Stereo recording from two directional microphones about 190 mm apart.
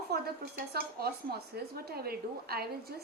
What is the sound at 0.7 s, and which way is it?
A woman's voice, 55° right (ahead or behind).